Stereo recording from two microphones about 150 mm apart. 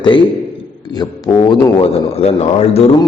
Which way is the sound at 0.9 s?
25° left (ahead or behind).